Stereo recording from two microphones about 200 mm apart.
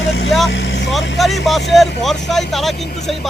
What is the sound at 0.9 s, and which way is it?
Speech, centre (ahead or behind).